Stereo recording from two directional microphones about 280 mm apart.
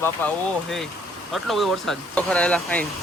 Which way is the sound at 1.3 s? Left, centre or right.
Centre.